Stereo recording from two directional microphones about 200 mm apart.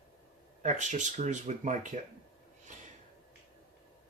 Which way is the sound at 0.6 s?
35° right (ahead or behind).